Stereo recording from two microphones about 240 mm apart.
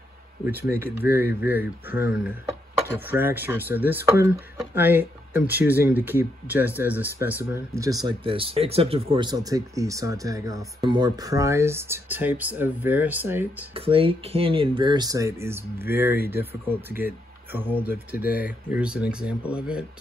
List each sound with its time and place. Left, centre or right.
0.5 s speech: centre
13.7 s speech: right; by 19.9 s centre